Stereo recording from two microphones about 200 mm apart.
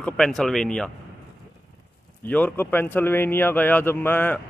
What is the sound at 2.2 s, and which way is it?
Speech, 10° left (ahead or behind).